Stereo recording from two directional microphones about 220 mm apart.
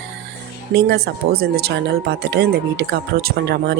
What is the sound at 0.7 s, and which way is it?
Speech, 50° right (ahead or behind).